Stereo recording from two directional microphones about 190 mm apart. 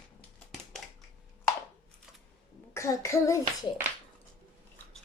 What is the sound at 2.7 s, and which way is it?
Speech, 15° left (ahead or behind).